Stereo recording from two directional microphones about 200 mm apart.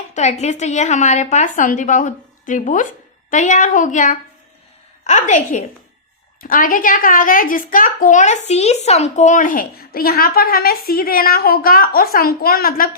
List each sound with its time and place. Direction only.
0.1 s a woman's voice: 35° left (ahead or behind)